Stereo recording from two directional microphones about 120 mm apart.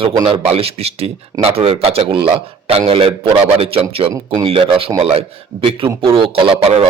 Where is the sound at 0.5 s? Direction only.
55° right (ahead or behind).